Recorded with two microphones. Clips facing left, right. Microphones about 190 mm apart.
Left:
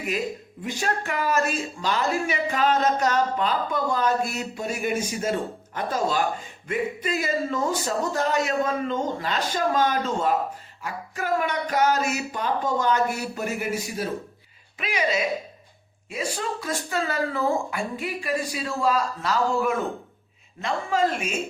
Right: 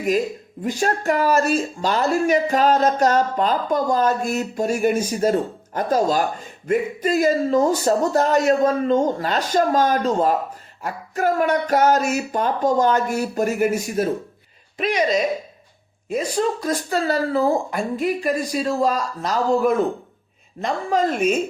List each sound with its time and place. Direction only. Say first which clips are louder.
0.6 s speech: right 6 dB; 40° right (ahead or behind)